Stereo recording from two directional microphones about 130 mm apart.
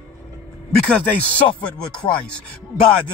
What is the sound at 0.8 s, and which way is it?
Speech, 5° left (ahead or behind).